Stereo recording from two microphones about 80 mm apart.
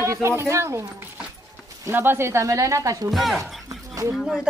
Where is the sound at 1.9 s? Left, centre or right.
Right.